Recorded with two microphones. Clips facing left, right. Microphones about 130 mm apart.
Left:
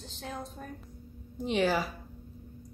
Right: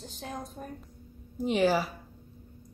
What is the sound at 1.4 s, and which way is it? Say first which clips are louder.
Speech: right 2 dB; centre (ahead or behind).